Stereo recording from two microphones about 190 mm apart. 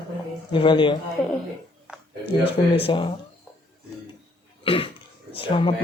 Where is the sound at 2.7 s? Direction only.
30° left (ahead or behind).